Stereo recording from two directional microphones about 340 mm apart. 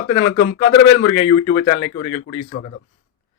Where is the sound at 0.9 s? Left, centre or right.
Left.